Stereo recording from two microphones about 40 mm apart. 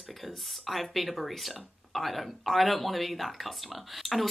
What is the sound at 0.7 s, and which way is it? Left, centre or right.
Speech, centre.